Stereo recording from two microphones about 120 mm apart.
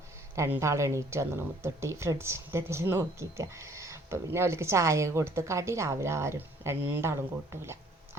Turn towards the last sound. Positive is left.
turn(degrees=-25)  # may be behind; listen again after turning